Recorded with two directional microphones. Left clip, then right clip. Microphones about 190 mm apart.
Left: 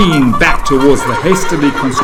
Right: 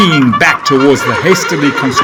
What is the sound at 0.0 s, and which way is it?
Speech, 30° right (ahead or behind).